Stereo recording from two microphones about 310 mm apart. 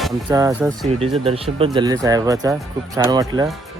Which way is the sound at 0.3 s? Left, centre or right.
Centre.